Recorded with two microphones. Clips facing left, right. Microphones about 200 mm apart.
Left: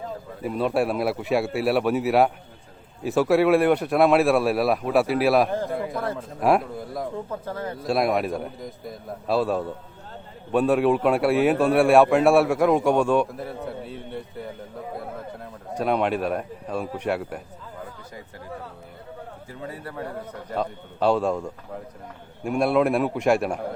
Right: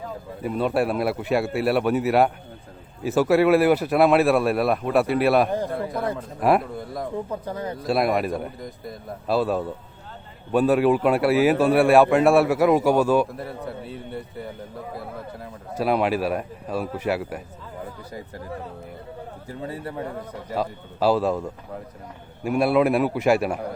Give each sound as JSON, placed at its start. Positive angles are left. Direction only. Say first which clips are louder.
{"t": 0.4, "sound": "a man's voice", "louder": "right 1 dB", "side_deg": 0}
{"t": 7.3, "sound": "speech", "louder": "right 1 dB", "side_deg": -15}
{"t": 7.8, "sound": "a man's voice", "louder": "right 1 dB", "side_deg": 0}
{"t": 19.6, "sound": "a man's voice", "louder": "right 3 dB", "side_deg": -25}
{"t": 20.5, "sound": "a man's voice", "louder": "right 1 dB", "side_deg": -5}